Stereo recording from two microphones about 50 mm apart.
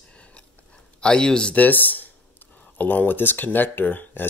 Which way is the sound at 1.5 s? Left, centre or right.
Left.